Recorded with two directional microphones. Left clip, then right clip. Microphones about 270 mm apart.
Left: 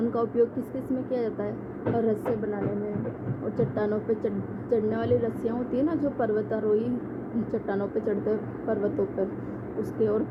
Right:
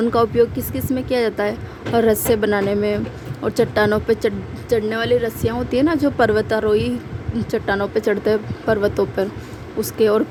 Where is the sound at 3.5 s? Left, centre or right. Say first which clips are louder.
Right 11 dB; right.